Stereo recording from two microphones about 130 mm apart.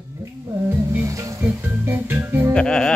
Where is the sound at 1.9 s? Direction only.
15° right (ahead or behind).